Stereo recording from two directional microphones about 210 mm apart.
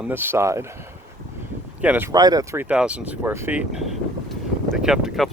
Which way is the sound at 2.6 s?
5° right (ahead or behind).